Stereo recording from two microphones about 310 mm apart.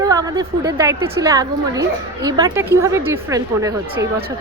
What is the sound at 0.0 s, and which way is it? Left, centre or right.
A woman's voice, centre.